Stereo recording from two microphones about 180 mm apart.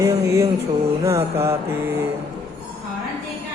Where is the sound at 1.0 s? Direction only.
15° right (ahead or behind).